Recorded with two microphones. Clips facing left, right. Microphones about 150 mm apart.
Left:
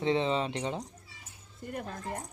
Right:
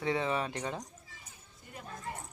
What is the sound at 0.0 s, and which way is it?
Speech, 20° left (ahead or behind).